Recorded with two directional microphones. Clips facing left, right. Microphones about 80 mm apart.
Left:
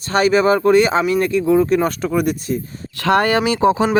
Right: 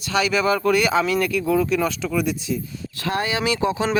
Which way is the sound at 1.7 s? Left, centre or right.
Left.